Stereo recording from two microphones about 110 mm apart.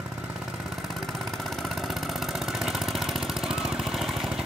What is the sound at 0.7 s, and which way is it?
Vehicle, centre (ahead or behind).